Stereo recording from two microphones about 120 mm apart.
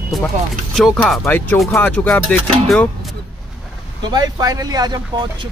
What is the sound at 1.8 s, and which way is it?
Music, 10° left (ahead or behind).